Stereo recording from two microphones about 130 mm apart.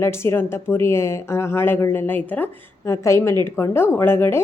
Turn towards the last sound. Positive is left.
turn(degrees=20)  # may be behind; listen again after turning